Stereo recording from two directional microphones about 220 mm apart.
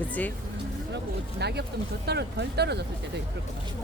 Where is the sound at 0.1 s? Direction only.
5° left (ahead or behind).